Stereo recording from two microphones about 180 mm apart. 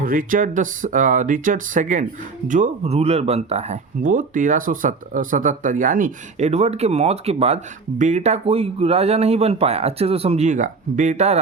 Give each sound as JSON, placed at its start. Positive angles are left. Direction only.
{"t": 0.0, "sound": "speech", "side_deg": -50}